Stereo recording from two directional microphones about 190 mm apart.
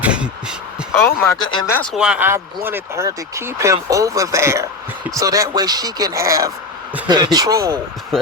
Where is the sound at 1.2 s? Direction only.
20° left (ahead or behind).